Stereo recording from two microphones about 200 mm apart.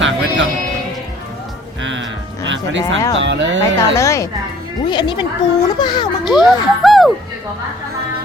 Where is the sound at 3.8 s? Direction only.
15° left (ahead or behind).